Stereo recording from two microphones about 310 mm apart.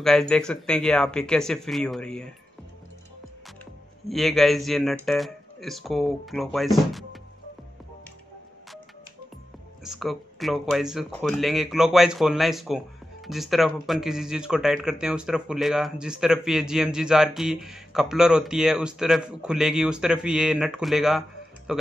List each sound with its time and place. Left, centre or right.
0.0 s speech: centre
4.1 s speech: centre
9.8 s speech: centre